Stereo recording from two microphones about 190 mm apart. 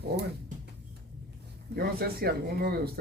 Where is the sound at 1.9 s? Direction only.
55° right (ahead or behind).